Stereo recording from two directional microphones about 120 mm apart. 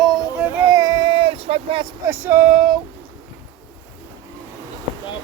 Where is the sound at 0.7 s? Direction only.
30° right (ahead or behind); by 1.8 s 55° right (ahead or behind).